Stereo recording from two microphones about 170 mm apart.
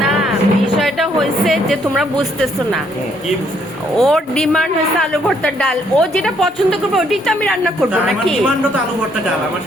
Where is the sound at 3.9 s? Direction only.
5° left (ahead or behind).